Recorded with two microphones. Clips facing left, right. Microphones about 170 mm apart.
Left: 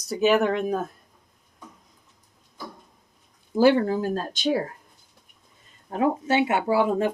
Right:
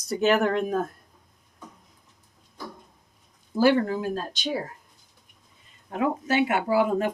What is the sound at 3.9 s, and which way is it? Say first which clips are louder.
Speech: left 3 dB; 40° left (ahead or behind).